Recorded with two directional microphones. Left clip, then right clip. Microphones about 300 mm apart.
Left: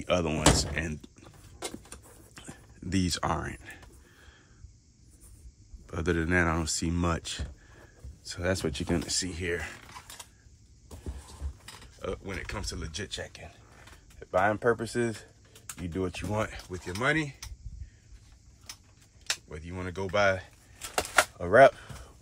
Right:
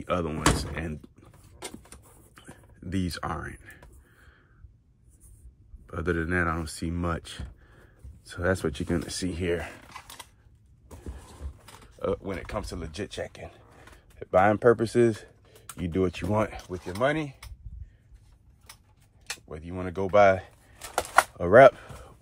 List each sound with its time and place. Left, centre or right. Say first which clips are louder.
0.0 s door: left 1 dB; centre
5.9 s speech: even; centre
12.0 s speech: right 6 dB; centre
17.0 s speech: right 2 dB; centre
19.5 s speech: right 4 dB; centre